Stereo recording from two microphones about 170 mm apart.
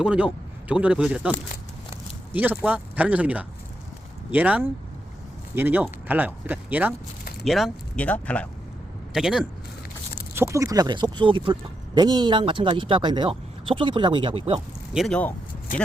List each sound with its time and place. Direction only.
0.0 s speech: 5° right (ahead or behind)
7.4 s speech: centre (ahead or behind)
9.1 s speech: 5° right (ahead or behind)
10.3 s speech: 15° right (ahead or behind); by 14.6 s 35° right (ahead or behind)
14.9 s speech: 5° left (ahead or behind)